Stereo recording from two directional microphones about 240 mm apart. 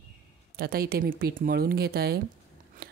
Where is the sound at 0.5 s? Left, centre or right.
Right.